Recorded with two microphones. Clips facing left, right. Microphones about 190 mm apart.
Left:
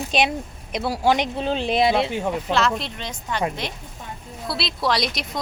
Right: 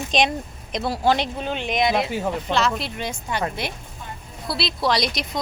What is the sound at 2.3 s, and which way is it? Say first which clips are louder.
A woman's voice: left 1 dB; centre (ahead or behind).